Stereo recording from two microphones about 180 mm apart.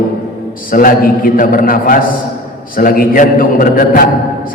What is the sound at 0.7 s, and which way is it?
A man's voice, 50° left (ahead or behind).